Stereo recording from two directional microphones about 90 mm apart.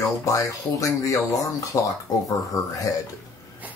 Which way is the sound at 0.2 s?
40° left (ahead or behind).